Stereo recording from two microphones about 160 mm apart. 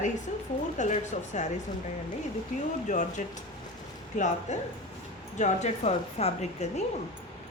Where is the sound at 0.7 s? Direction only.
50° left (ahead or behind).